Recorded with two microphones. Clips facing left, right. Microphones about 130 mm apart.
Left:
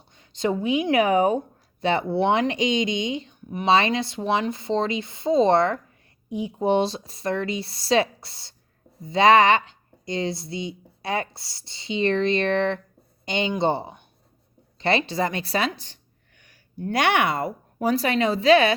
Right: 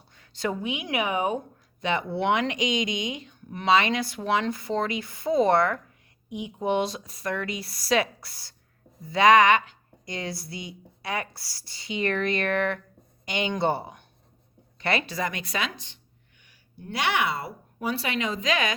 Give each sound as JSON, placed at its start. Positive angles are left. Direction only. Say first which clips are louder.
{"t": 0.2, "sound": "a woman's voice", "louder": "left 5 dB", "side_deg": 25}
{"t": 16.4, "sound": "a woman's voice", "louder": "left 13 dB", "side_deg": 50}